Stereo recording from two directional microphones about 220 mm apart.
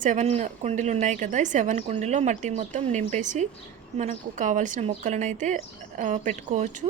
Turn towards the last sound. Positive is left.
turn(degrees=-35)  # may be behind; listen again after turning